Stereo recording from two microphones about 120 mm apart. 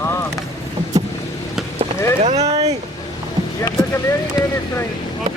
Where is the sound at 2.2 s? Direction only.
70° right (ahead or behind).